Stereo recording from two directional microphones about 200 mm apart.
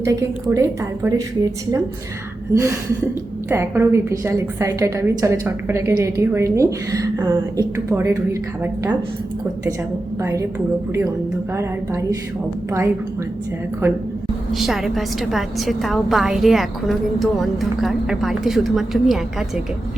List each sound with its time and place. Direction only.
0.0 s a woman's voice: 15° right (ahead or behind)
2.5 s a woman's voice: 15° right (ahead or behind)
10.2 s a woman's voice: 15° right (ahead or behind)
11.5 s a woman's voice: 15° right (ahead or behind)
14.5 s a woman's voice: centre (ahead or behind)